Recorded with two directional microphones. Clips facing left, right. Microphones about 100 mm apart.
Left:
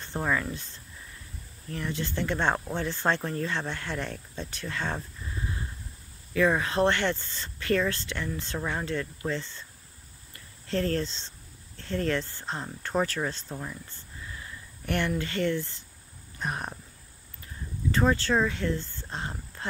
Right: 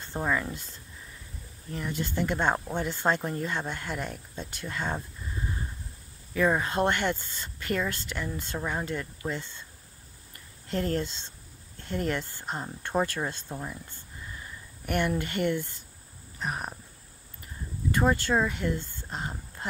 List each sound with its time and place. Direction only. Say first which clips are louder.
0.1 s speech: even; 10° right (ahead or behind)
1.7 s speech: even; 10° right (ahead or behind)
6.3 s speech: left 1 dB; 10° right (ahead or behind)
10.7 s speech: left 1 dB; 15° right (ahead or behind)
14.9 s speech: right 1 dB; 10° right (ahead or behind)
16.3 s a sound: even; 5° right (ahead or behind)
17.9 s speech: even; 10° right (ahead or behind)